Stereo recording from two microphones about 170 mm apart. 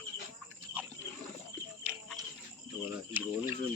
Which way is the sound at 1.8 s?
10° right (ahead or behind).